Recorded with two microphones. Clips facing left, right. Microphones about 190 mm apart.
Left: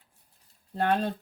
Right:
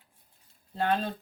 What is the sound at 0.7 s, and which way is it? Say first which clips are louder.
Speech: left 2 dB; 55° left (ahead or behind).